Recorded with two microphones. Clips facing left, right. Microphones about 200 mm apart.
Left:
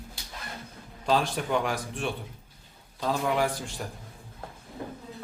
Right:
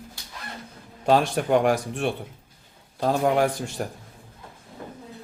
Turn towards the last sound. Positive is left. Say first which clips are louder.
# right 5 dB
turn(degrees=-50)  # may be behind; listen again after turning